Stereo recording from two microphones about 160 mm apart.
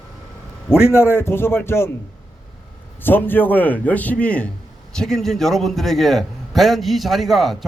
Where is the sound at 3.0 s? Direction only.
10° left (ahead or behind).